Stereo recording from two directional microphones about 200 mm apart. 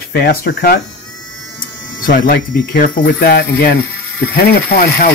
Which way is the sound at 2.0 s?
45° left (ahead or behind).